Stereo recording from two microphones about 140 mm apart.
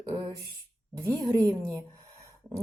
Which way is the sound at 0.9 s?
20° right (ahead or behind).